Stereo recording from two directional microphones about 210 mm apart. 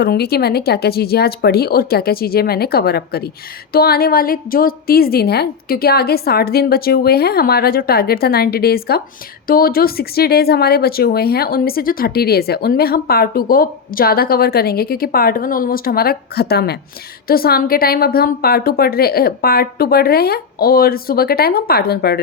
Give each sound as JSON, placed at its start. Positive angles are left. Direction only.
{"t": 0.0, "sound": "speech", "side_deg": 50}